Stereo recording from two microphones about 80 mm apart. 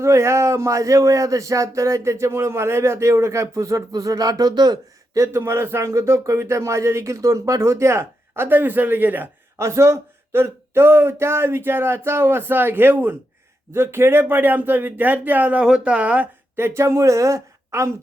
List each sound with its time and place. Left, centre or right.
0.0 s speech: right
5.1 s speech: right
9.6 s a man's voice: right; by 16.3 s centre
16.6 s speech: right